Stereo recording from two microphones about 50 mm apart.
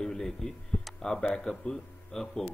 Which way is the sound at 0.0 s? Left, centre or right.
Centre.